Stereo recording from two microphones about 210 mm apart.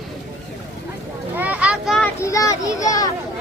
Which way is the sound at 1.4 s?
5° right (ahead or behind).